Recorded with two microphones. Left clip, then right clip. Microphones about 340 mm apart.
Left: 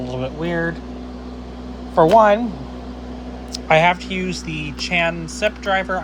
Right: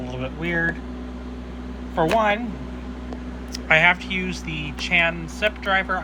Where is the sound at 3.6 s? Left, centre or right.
Centre.